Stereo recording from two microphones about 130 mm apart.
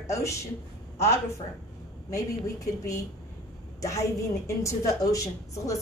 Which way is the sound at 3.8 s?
25° left (ahead or behind).